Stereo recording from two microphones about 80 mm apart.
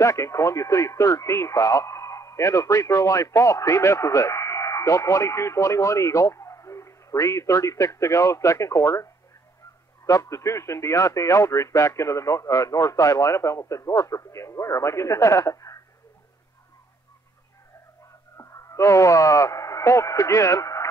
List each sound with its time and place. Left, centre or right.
0.0 s speech: left
18.4 s speech: left